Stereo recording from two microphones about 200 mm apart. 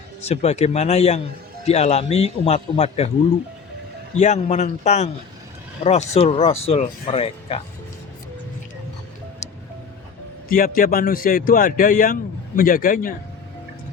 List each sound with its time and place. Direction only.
0.3 s speech: 30° left (ahead or behind)
4.2 s speech: 35° left (ahead or behind)
10.5 s speech: 45° left (ahead or behind)